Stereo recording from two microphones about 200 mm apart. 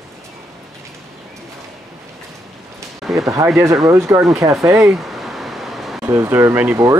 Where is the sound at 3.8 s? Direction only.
15° right (ahead or behind).